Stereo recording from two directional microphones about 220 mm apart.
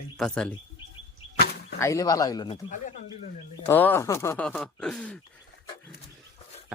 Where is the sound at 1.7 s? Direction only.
15° left (ahead or behind).